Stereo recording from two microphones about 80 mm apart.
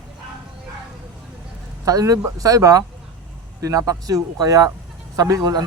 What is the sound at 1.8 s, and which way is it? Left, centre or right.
Speech, right.